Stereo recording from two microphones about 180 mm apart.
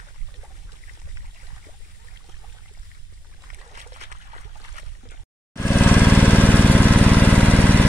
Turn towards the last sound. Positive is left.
turn(degrees=10)  # may be behind; listen again after turning